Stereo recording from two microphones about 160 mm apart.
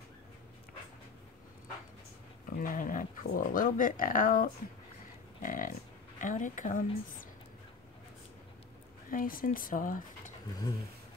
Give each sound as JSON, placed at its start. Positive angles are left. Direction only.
{"t": 2.5, "sound": "speech", "side_deg": 60}
{"t": 9.1, "sound": "speech", "side_deg": 60}